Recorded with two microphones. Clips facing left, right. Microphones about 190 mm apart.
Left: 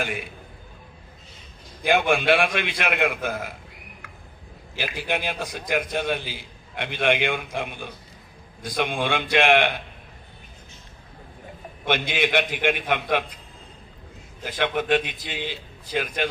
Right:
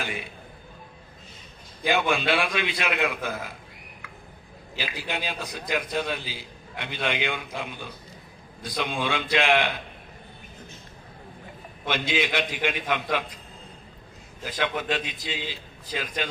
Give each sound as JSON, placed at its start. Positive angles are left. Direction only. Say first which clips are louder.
{"t": 0.0, "sound": "a man's voice", "louder": "left 4 dB", "side_deg": 55}
{"t": 1.9, "sound": "a man's voice", "louder": "left 4 dB", "side_deg": 55}
{"t": 4.8, "sound": "a man's voice", "louder": "left 4 dB", "side_deg": 55}
{"t": 11.9, "sound": "a man's voice", "louder": "left 3 dB", "side_deg": 55}
{"t": 14.6, "sound": "a man's voice", "louder": "left 5 dB", "side_deg": 50}